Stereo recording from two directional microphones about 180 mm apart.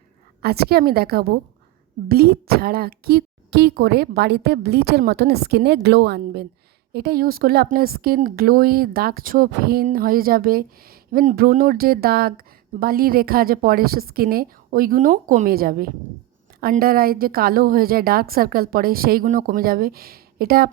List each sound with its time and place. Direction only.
0.4 s speech: 60° right (ahead or behind)